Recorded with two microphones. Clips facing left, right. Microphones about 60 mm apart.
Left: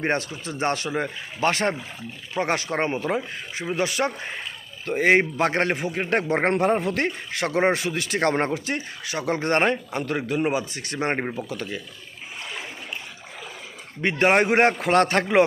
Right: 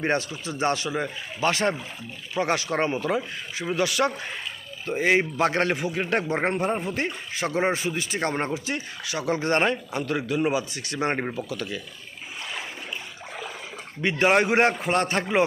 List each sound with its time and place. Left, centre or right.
0.0 s speech: left
4.9 s speech: left
6.3 s speech: left
14.0 s speech: left
14.8 s speech: left